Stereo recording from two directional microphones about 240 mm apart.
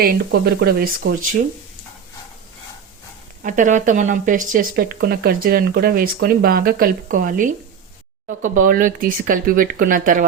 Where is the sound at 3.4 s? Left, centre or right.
Right.